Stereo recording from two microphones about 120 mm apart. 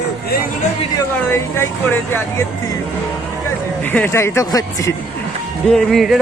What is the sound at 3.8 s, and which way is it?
Speech, 15° left (ahead or behind).